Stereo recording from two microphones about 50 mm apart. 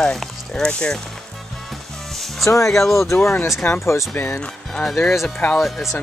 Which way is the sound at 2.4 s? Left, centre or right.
Left.